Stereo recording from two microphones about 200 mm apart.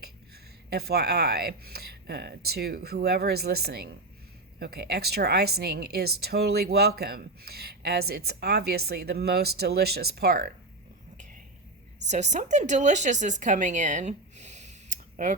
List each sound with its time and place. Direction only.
0.7 s speech: 50° right (ahead or behind)
12.0 s speech: 35° right (ahead or behind)